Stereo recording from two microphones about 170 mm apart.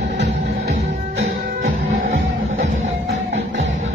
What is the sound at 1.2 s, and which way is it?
Music, 45° right (ahead or behind).